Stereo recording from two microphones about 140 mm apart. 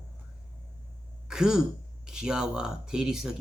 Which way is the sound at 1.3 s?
5° right (ahead or behind).